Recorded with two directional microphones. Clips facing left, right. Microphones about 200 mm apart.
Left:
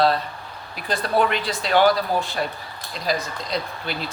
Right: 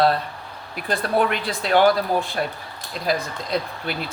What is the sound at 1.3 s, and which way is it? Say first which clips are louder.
Speech: right 1 dB; 50° right (ahead or behind).